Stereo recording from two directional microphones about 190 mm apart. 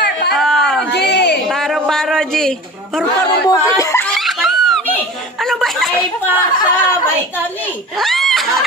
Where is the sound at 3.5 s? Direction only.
15° left (ahead or behind).